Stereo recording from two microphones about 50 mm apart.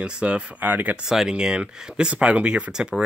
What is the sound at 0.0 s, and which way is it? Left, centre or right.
Speech, right.